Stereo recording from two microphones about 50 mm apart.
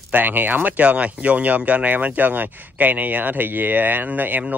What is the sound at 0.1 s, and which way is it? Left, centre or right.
Speech, right.